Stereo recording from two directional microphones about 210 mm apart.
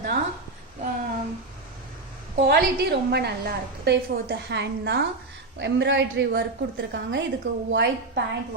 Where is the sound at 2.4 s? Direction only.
50° right (ahead or behind).